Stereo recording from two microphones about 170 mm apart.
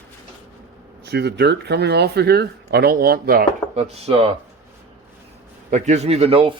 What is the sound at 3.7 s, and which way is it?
Speech, 35° right (ahead or behind).